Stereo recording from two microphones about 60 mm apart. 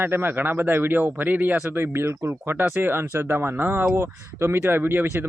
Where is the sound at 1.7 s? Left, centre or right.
Right.